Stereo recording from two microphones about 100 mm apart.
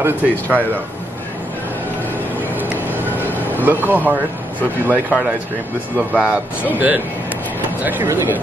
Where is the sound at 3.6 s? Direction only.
20° right (ahead or behind).